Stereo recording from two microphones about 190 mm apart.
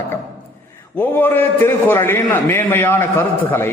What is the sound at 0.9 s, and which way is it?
A man's voice, 10° left (ahead or behind).